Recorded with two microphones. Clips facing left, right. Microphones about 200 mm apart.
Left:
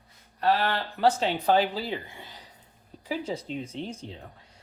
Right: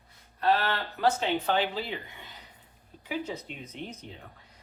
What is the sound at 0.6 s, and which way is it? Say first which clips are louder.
Speech: left 3 dB; 35° left (ahead or behind).